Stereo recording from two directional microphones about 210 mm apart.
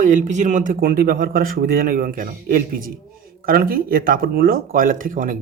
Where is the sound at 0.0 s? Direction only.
35° right (ahead or behind).